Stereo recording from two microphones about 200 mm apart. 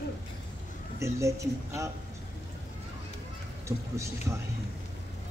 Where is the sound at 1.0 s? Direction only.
15° right (ahead or behind).